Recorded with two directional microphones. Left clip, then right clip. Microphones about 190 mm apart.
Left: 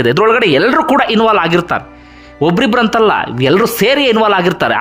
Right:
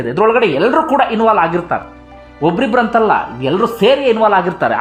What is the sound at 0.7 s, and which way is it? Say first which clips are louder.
Speech: left 2 dB; 45° left (ahead or behind).